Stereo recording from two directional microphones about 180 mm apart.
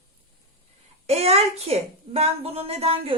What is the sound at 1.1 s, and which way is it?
Speech, 35° right (ahead or behind).